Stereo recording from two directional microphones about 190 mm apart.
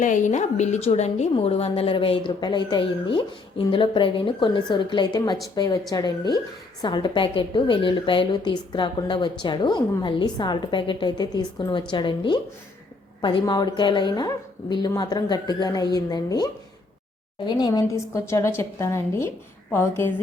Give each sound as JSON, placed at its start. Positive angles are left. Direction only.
{"t": 0.0, "sound": "a woman's voice", "side_deg": 40}